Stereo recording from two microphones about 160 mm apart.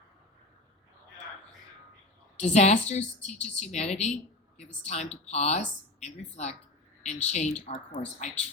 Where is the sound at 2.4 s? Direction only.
45° left (ahead or behind).